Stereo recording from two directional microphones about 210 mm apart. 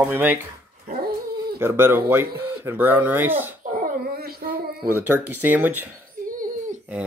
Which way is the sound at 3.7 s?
45° right (ahead or behind).